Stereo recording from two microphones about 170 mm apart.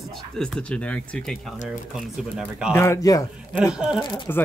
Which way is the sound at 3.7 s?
5° right (ahead or behind).